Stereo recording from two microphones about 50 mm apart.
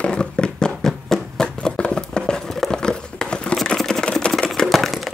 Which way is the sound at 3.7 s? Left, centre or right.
Centre.